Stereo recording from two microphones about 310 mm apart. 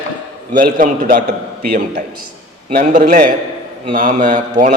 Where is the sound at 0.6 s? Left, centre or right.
Right.